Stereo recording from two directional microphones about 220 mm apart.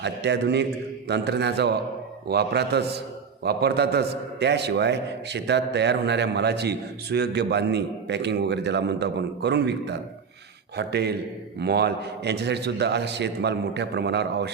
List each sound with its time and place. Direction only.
0.0 s a man's voice: 50° right (ahead or behind)